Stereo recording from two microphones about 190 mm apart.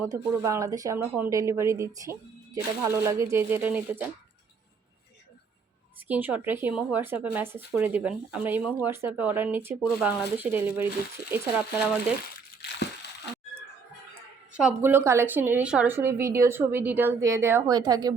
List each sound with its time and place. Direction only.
0.0 s speech: 15° right (ahead or behind)
6.1 s speech: 10° right (ahead or behind)
12.6 s a sound: 60° left (ahead or behind)
14.8 s speech: 10° right (ahead or behind)